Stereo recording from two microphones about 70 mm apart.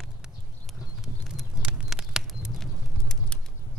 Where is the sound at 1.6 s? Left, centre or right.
Centre.